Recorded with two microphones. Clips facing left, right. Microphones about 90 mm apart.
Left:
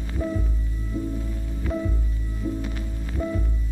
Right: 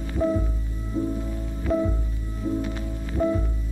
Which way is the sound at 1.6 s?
30° right (ahead or behind).